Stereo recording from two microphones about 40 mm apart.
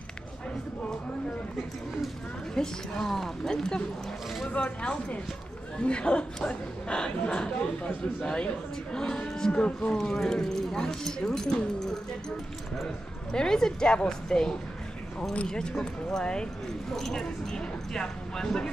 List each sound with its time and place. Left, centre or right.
2.5 s speech: centre
4.5 s speech: left
10.0 s speech: centre
13.3 s speech: centre